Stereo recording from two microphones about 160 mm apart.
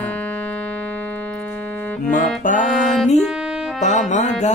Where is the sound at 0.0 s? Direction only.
10° left (ahead or behind).